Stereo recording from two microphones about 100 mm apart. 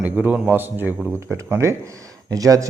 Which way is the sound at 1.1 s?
30° right (ahead or behind).